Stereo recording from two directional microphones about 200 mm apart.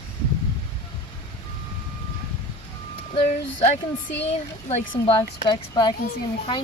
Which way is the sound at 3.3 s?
40° left (ahead or behind).